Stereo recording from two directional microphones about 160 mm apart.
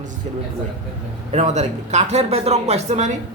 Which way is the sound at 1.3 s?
45° right (ahead or behind).